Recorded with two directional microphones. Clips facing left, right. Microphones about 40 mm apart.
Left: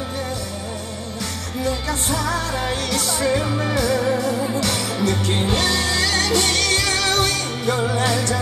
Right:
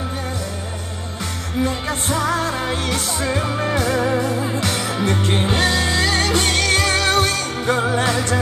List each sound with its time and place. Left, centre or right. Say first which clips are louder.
1.6 s music: right 2 dB; right